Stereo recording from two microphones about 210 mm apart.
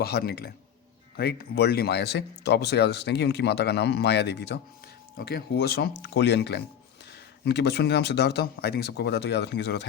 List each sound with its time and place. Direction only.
0.0 s speech: 50° left (ahead or behind)